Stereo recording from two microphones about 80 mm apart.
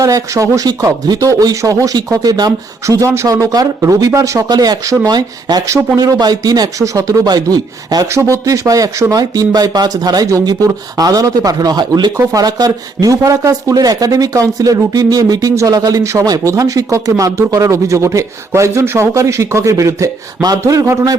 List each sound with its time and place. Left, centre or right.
0.0 s speech: right
2.8 s speech: right
4.4 s speech: right
8.0 s speech: right